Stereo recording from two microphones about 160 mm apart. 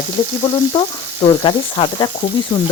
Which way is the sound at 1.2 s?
30° left (ahead or behind).